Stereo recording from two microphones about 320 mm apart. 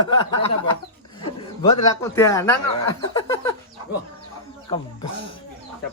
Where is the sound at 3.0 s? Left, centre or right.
Centre.